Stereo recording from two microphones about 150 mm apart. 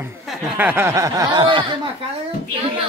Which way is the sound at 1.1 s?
30° right (ahead or behind).